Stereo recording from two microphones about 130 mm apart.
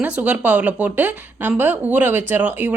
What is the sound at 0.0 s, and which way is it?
Speech, 10° right (ahead or behind).